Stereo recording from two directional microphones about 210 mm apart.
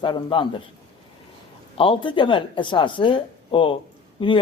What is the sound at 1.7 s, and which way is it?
Speech, 25° left (ahead or behind).